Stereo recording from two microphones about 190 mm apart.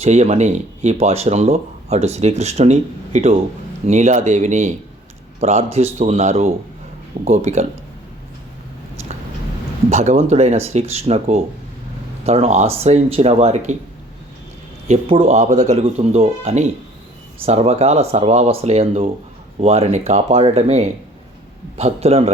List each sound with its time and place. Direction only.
0.0 s speech: 35° right (ahead or behind)
9.9 s speech: 35° right (ahead or behind)
14.8 s speech: 30° right (ahead or behind)